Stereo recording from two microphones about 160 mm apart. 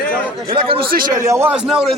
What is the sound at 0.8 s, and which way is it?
Speech, 65° right (ahead or behind).